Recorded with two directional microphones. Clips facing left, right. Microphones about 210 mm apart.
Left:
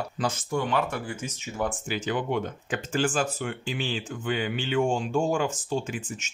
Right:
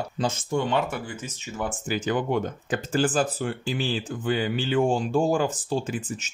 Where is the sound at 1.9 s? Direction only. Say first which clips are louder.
Right 7 dB; 45° right (ahead or behind).